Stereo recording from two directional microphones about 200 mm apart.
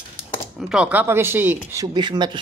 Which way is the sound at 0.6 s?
5° right (ahead or behind).